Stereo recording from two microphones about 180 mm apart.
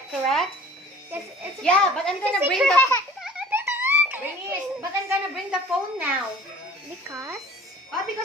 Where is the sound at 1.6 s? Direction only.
5° left (ahead or behind).